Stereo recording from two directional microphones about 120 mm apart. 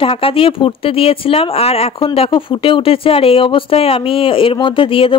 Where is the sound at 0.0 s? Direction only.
50° left (ahead or behind).